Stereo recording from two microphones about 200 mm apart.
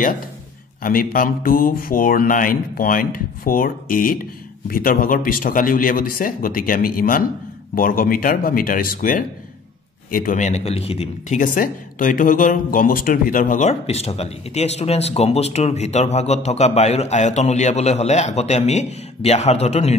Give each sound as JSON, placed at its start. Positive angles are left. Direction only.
{"t": 0.8, "sound": "speech", "side_deg": 45}